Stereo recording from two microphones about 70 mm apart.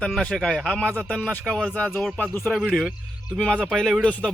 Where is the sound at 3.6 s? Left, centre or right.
Centre.